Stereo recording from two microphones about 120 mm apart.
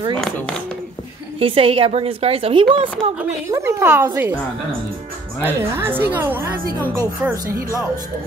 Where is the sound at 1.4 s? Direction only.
50° right (ahead or behind).